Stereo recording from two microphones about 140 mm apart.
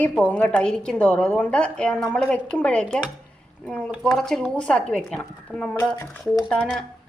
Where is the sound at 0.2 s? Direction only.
10° left (ahead or behind).